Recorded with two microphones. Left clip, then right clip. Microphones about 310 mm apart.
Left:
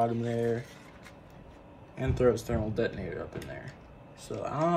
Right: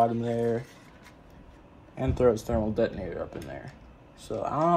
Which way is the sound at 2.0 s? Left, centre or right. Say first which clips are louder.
Right 3 dB; centre.